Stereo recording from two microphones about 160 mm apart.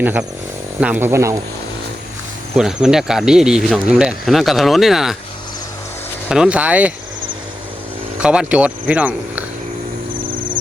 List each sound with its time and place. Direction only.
0.0 s speech: 10° right (ahead or behind)
2.6 s speech: 5° right (ahead or behind)
6.2 s speech: 5° right (ahead or behind)
8.2 s speech: 5° right (ahead or behind)